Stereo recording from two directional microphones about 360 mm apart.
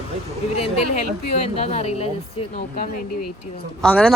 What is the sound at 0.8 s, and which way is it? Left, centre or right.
Speech, left.